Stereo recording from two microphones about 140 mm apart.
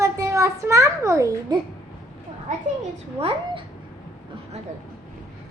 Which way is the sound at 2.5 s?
60° right (ahead or behind).